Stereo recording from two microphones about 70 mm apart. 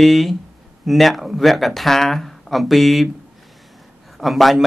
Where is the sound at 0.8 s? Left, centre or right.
Centre.